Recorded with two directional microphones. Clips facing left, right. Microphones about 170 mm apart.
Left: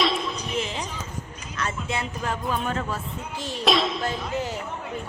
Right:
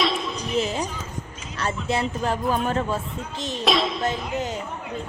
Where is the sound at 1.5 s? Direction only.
35° right (ahead or behind).